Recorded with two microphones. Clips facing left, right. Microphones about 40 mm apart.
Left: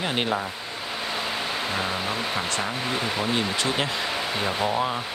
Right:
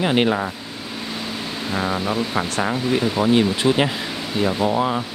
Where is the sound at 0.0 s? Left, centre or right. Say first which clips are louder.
Right 7 dB; centre.